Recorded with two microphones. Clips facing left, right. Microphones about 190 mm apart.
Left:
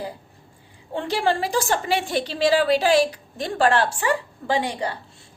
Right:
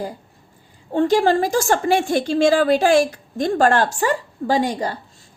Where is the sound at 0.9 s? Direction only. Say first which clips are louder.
Right 7 dB; 45° right (ahead or behind).